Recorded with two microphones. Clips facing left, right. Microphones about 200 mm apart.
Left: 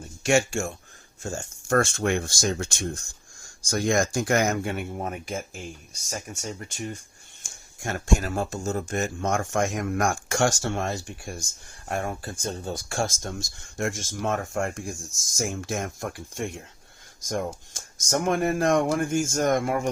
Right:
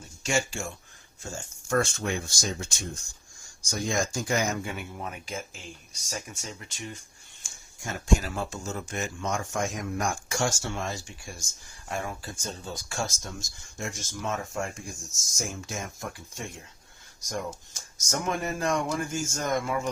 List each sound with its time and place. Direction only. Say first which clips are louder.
0.3 s speech: left 7 dB; 55° left (ahead or behind); by 3.0 s 75° left (ahead or behind)
3.7 s speech: left 6 dB; 65° left (ahead or behind); by 7.0 s 45° left (ahead or behind)
7.4 s a sound: left 5 dB; 60° left (ahead or behind)
8.0 s speech: left 1 dB; 50° left (ahead or behind)